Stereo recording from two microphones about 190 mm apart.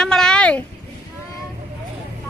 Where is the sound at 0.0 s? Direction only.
5° left (ahead or behind).